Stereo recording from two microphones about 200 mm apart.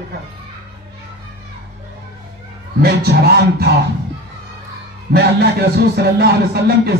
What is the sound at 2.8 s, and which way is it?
Speech, 50° right (ahead or behind).